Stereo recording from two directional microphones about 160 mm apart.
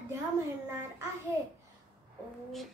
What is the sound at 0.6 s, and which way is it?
Speech, 15° right (ahead or behind).